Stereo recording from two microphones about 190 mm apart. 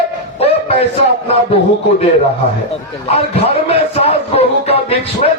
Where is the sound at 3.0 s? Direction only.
30° left (ahead or behind).